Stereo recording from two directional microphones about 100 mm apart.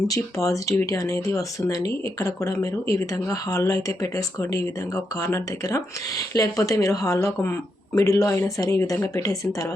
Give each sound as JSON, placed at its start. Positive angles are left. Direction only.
{"t": 0.1, "sound": "speech", "side_deg": 35}